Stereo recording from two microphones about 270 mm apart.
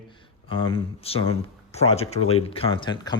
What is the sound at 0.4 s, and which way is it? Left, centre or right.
Speech, centre.